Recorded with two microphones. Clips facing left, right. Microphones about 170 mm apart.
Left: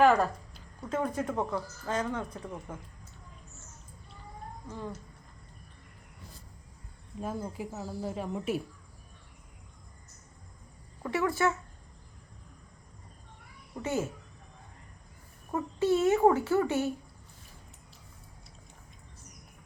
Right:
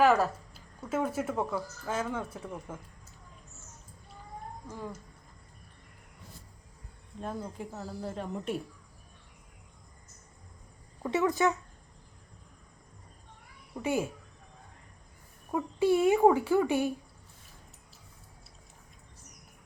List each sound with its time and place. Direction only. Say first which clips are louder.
0.0 s speech: left 1 dB; 5° right (ahead or behind)
4.7 s speech: left 1 dB; 10° right (ahead or behind)
7.2 s speech: left 2 dB; 5° left (ahead or behind)
11.0 s speech: right 2 dB; 20° right (ahead or behind)
13.8 s speech: right 1 dB; 10° right (ahead or behind)
15.5 s speech: right 1 dB; 10° right (ahead or behind)